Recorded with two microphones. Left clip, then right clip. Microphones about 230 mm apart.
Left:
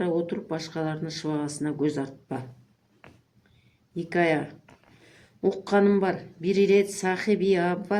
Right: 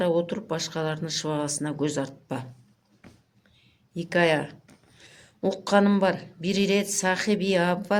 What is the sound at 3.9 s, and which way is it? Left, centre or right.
Speech, right.